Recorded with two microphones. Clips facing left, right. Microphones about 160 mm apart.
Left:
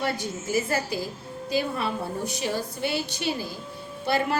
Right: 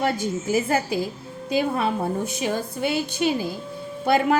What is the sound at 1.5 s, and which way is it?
A woman's voice, 50° right (ahead or behind).